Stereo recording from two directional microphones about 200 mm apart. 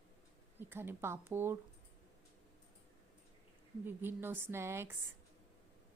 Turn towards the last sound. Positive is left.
turn(degrees=-10)  # may be behind; listen again after turning